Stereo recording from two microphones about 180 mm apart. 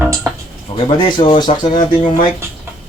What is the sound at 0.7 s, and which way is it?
Speech, 25° left (ahead or behind).